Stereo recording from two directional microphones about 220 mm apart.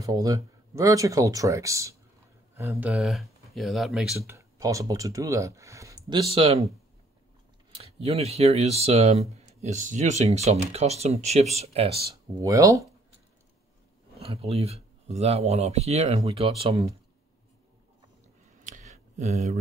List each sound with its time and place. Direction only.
0.0 s speech: 15° right (ahead or behind)
2.9 s speech: centre (ahead or behind)
4.3 s speech: 15° right (ahead or behind)
6.3 s speech: 25° right (ahead or behind)
7.7 s speech: 25° right (ahead or behind)
12.4 s speech: 15° right (ahead or behind)
14.1 s speech: 25° right (ahead or behind)
18.6 s a sound: 35° right (ahead or behind)